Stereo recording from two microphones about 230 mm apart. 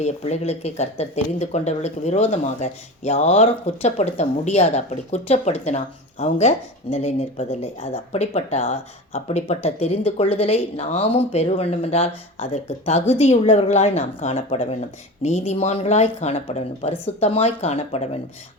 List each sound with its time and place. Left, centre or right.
0.0 s speech: left